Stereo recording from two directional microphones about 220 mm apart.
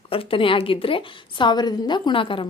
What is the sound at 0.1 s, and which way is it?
A woman's voice, 25° left (ahead or behind).